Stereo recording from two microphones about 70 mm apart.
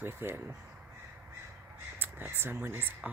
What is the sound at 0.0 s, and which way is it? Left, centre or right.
Speech, right.